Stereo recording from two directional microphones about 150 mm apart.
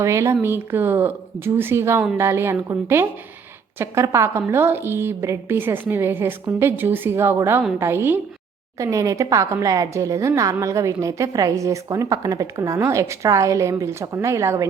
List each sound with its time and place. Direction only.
0.0 s a woman's voice: 20° right (ahead or behind)